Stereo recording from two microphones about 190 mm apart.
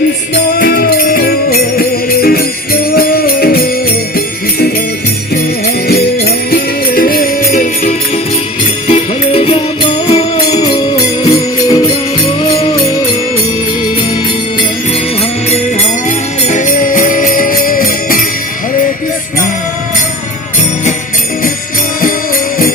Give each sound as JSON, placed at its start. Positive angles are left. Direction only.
{"t": 0.6, "sound": "music", "side_deg": 50}
{"t": 5.9, "sound": "music", "side_deg": 55}
{"t": 8.9, "sound": "music", "side_deg": 30}
{"t": 10.6, "sound": "music", "side_deg": 20}
{"t": 16.0, "sound": "jingle bell", "side_deg": 40}